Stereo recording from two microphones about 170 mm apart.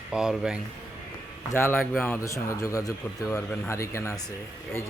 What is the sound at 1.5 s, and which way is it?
Speech, 10° left (ahead or behind).